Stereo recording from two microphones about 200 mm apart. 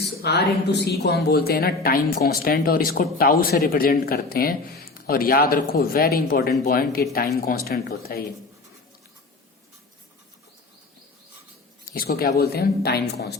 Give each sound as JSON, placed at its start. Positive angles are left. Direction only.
{"t": 0.2, "sound": "a woman's voice", "side_deg": 55}
{"t": 11.9, "sound": "a woman's voice", "side_deg": 50}